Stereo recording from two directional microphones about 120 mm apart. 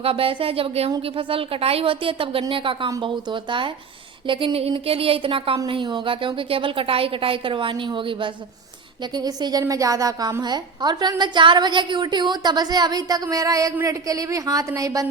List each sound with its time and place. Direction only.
0.0 s a woman's voice: 50° right (ahead or behind); by 15.0 s 30° right (ahead or behind)